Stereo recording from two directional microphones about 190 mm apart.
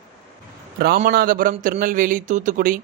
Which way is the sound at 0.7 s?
50° right (ahead or behind).